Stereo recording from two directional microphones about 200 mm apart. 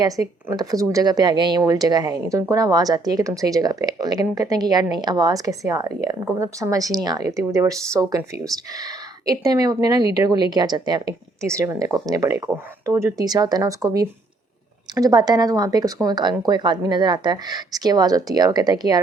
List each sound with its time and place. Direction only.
0.0 s a woman's voice: 20° right (ahead or behind)